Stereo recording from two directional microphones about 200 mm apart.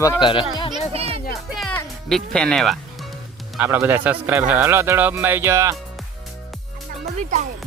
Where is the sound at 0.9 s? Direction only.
30° right (ahead or behind).